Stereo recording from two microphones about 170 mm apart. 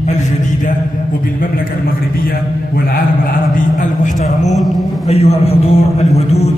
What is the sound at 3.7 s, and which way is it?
Speech, 50° left (ahead or behind).